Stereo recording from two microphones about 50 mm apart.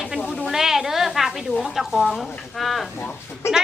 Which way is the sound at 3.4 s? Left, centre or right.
Left.